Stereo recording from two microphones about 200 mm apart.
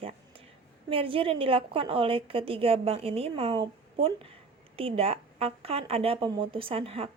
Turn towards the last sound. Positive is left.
turn(degrees=-30)  # may be behind; listen again after turning